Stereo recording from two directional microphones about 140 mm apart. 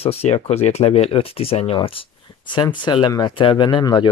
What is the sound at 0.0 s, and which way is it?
Speech, 45° left (ahead or behind).